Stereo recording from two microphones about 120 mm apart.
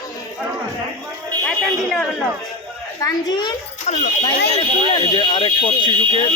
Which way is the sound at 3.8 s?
90° left.